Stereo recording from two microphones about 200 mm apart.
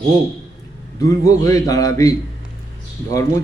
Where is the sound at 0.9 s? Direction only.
15° left (ahead or behind).